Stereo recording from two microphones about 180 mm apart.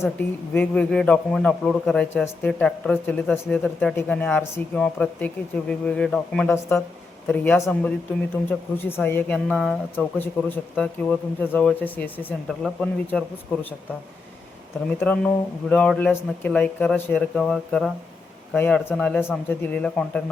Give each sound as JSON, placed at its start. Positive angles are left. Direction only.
{"t": 0.2, "sound": "a man's voice", "side_deg": 10}
{"t": 9.5, "sound": "a man's voice", "side_deg": -5}
{"t": 10.2, "sound": "a man's voice", "side_deg": 10}
{"t": 14.8, "sound": "a man's voice", "side_deg": 5}